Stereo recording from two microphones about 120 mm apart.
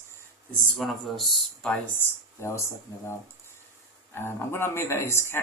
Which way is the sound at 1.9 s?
20° left (ahead or behind).